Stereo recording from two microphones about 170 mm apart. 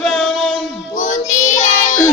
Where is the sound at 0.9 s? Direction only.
50° left (ahead or behind).